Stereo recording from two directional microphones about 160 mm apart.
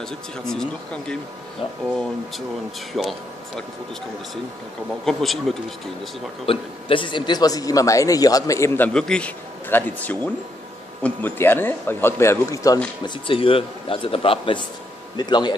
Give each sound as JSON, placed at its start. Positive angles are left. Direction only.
{"t": 0.5, "sound": "speech", "side_deg": 5}
{"t": 2.9, "sound": "speech", "side_deg": 0}
{"t": 5.0, "sound": "speech", "side_deg": 0}
{"t": 6.4, "sound": "a man's voice", "side_deg": 35}
{"t": 13.0, "sound": "a man's voice", "side_deg": 35}